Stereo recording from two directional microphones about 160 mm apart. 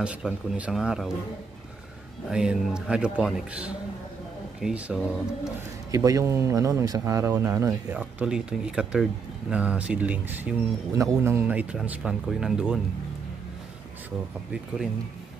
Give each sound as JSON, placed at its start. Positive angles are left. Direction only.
{"t": 0.0, "sound": "a man's voice", "side_deg": -5}
{"t": 2.2, "sound": "a man's voice", "side_deg": -5}
{"t": 5.9, "sound": "speech", "side_deg": -20}